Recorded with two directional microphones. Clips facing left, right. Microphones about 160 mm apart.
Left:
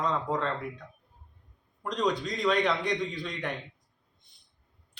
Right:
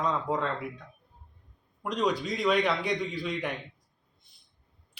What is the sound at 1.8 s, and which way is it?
Speech, 5° right (ahead or behind).